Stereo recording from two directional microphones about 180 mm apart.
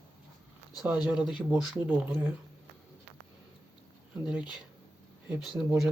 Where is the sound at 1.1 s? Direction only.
5° right (ahead or behind).